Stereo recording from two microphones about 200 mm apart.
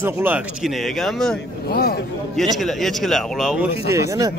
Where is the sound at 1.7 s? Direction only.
50° left (ahead or behind).